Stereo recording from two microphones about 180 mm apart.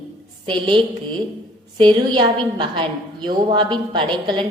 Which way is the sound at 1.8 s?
25° right (ahead or behind).